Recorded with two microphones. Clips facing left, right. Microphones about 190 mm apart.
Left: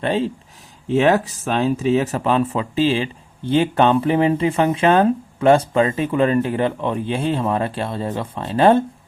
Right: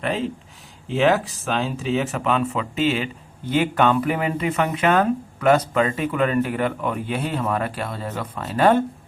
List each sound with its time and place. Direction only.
0.0 s speech: 30° left (ahead or behind)
0.9 s speech: 45° left (ahead or behind); by 8.8 s 25° left (ahead or behind)